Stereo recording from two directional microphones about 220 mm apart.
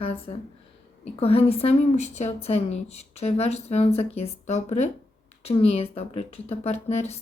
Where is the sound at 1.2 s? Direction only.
25° left (ahead or behind).